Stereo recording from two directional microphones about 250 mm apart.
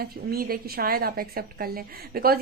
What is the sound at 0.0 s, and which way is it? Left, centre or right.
A woman's voice, right.